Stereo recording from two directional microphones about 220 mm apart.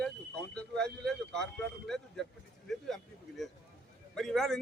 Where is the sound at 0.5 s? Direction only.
5° left (ahead or behind).